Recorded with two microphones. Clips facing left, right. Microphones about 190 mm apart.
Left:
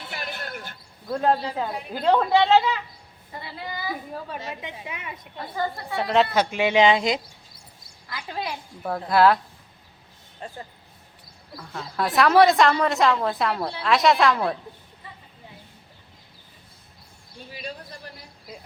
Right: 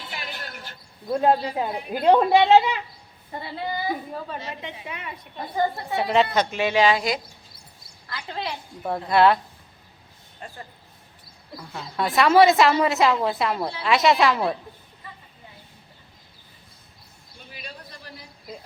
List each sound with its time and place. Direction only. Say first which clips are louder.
0.1 s a sound: left 4 dB; 55° left (ahead or behind)
1.0 s speech: right 2 dB; 15° right (ahead or behind)
3.7 s a woman's voice: right 4 dB; 30° right (ahead or behind)
4.3 s a woman's voice: even; 15° left (ahead or behind)
5.5 s a woman's voice: right 4 dB; 20° right (ahead or behind)
6.0 s a woman's voice: even; 5° right (ahead or behind)
6.3 s a woman's voice: left 1 dB; 10° left (ahead or behind)
8.1 s a woman's voice: even; 10° left (ahead or behind)
8.8 s a woman's voice: even; centre (ahead or behind)
11.7 s a woman's voice: even; centre (ahead or behind)